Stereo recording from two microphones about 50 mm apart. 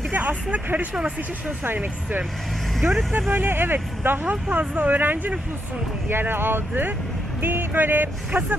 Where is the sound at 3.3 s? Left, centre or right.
Right.